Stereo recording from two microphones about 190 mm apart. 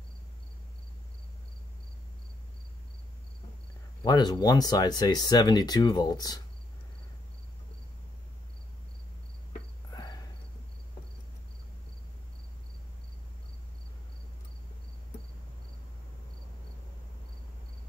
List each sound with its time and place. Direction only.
4.0 s speech: 20° left (ahead or behind)